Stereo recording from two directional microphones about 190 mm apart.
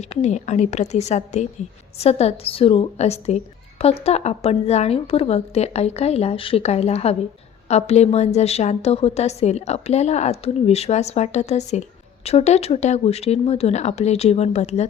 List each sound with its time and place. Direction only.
0.0 s a woman's voice: 35° left (ahead or behind)